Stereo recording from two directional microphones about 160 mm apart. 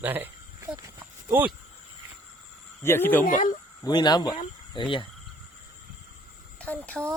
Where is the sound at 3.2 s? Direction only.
55° left (ahead or behind).